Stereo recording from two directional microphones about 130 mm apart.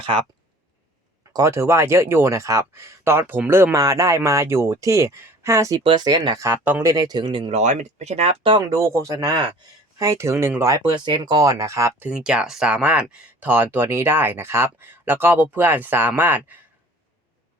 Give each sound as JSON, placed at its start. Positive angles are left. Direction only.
{"t": 0.0, "sound": "speech", "side_deg": -40}
{"t": 1.3, "sound": "speech", "side_deg": -25}
{"t": 5.8, "sound": "speech", "side_deg": -35}
{"t": 6.9, "sound": "a man's voice", "side_deg": -30}
{"t": 7.5, "sound": "speech", "side_deg": -65}
{"t": 8.7, "sound": "speech", "side_deg": -25}
{"t": 10.8, "sound": "speech", "side_deg": -40}
{"t": 12.0, "sound": "speech", "side_deg": -5}